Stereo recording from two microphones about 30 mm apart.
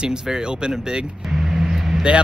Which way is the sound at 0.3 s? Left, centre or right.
Right.